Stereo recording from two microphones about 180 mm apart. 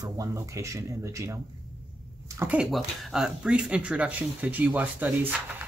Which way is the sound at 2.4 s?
5° right (ahead or behind).